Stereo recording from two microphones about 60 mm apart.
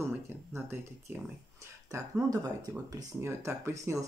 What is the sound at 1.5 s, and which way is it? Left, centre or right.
Speech, right.